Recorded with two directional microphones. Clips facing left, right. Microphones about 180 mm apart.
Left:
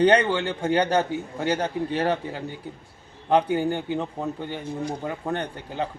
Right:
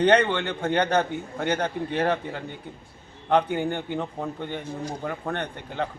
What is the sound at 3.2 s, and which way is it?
Speech, 10° left (ahead or behind).